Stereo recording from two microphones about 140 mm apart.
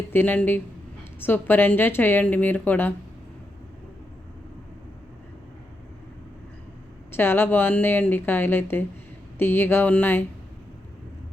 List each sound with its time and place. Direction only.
0.1 s a woman's voice: 15° left (ahead or behind)
7.2 s a woman's voice: 15° left (ahead or behind)